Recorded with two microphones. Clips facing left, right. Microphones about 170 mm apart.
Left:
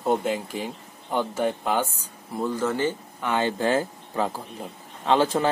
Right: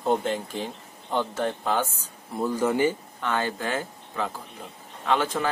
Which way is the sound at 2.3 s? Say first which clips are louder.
Right 1 dB; 5° right (ahead or behind).